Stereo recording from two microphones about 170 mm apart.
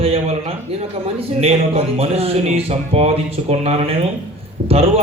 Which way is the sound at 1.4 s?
35° right (ahead or behind).